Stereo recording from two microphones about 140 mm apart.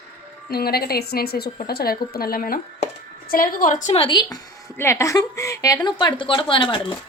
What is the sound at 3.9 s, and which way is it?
Speech, 35° left (ahead or behind).